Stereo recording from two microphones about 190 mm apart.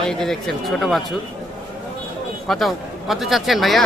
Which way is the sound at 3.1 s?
Centre (ahead or behind).